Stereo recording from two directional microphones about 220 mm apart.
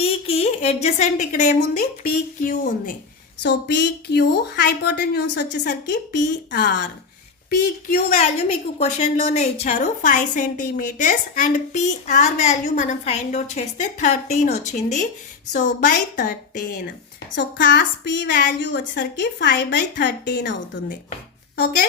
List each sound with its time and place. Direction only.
0.0 s a woman's voice: 25° left (ahead or behind)
3.4 s a woman's voice: 50° left (ahead or behind)
7.5 s a woman's voice: 35° left (ahead or behind)
17.3 s a woman's voice: 50° left (ahead or behind)